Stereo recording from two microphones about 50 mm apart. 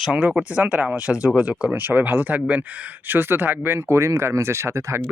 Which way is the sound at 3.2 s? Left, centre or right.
Right.